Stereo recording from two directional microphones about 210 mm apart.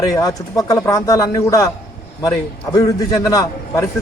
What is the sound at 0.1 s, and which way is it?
A man's voice, 15° left (ahead or behind).